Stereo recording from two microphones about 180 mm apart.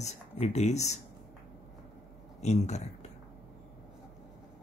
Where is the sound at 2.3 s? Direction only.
40° left (ahead or behind).